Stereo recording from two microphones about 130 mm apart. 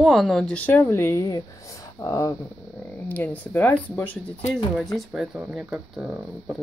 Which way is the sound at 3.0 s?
15° left (ahead or behind).